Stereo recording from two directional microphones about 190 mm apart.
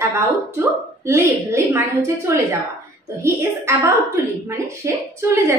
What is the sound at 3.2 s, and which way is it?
A woman's voice, 15° right (ahead or behind).